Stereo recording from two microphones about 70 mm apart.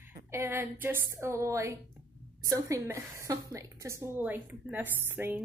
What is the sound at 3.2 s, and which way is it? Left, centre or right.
Speech, right.